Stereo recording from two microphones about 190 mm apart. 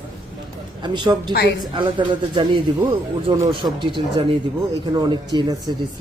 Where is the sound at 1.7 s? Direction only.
25° right (ahead or behind).